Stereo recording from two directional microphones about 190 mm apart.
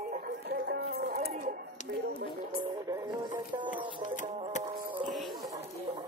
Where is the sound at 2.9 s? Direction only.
15° right (ahead or behind).